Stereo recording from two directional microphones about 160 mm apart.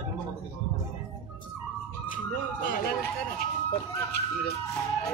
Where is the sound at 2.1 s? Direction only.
60° left (ahead or behind).